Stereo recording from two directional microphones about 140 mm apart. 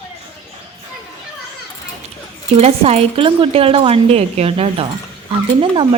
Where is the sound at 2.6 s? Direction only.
50° right (ahead or behind).